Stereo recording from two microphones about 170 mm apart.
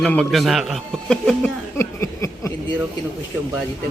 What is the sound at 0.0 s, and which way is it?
A man's voice, 5° left (ahead or behind).